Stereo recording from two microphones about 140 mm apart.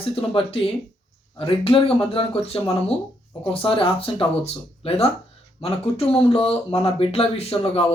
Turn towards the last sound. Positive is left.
turn(degrees=45)  # may be behind; listen again after turning